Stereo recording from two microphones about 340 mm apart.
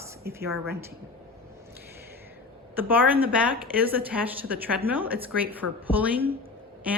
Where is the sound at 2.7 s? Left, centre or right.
Centre.